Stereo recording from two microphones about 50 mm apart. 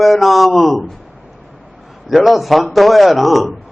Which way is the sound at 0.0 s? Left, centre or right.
Centre.